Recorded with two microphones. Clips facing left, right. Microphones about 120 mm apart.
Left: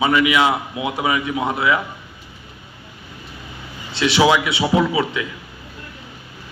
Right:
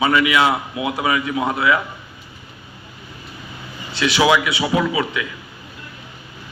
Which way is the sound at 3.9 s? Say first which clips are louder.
Left 1 dB; 25° left (ahead or behind).